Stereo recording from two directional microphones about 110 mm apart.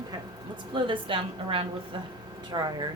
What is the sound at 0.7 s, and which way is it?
Speech, 50° right (ahead or behind).